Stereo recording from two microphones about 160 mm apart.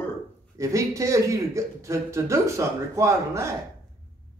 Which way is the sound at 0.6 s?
20° right (ahead or behind).